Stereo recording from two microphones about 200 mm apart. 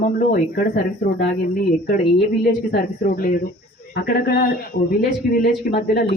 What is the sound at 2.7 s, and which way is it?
Speech, 45° left (ahead or behind).